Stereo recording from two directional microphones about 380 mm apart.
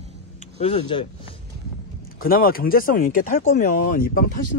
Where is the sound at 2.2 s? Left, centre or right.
Left.